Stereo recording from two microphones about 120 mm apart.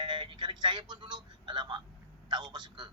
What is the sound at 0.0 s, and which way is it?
Speech, 40° right (ahead or behind).